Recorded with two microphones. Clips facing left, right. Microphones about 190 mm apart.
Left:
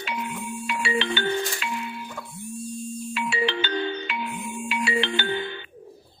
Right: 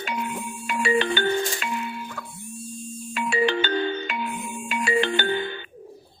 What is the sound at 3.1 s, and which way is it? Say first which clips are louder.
Music: right 5 dB; 45° right (ahead or behind).